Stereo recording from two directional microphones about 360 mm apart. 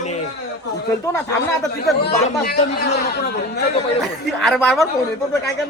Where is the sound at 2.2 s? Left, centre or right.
Left.